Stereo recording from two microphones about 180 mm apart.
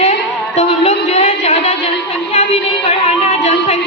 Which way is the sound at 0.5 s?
35° left (ahead or behind).